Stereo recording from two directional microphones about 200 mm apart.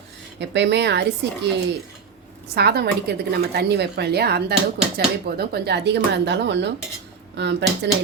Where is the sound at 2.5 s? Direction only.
55° right (ahead or behind).